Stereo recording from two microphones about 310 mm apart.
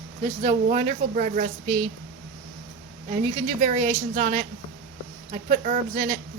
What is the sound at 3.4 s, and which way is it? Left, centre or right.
Speech, right.